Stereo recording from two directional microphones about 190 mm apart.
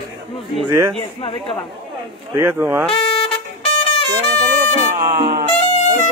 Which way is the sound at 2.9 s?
30° left (ahead or behind).